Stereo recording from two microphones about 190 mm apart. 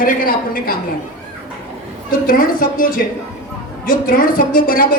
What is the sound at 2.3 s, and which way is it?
A woman's voice, 45° left (ahead or behind).